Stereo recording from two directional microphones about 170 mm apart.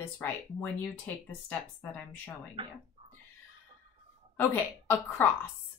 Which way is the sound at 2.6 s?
30° right (ahead or behind).